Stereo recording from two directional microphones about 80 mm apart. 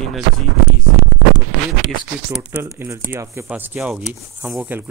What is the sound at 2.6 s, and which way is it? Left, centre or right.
Speech, right.